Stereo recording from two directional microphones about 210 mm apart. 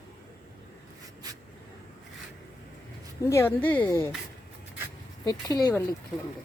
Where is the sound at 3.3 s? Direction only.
10° left (ahead or behind).